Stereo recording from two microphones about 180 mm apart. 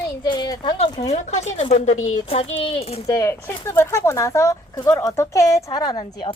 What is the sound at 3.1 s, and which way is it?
A woman's voice, 15° left (ahead or behind).